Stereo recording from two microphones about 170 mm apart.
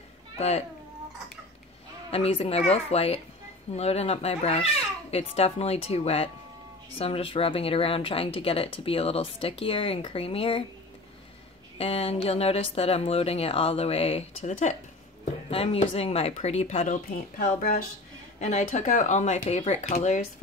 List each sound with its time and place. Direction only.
0.4 s speech: 40° left (ahead or behind)
2.0 s speech: 35° left (ahead or behind)
11.8 s speech: 35° left (ahead or behind)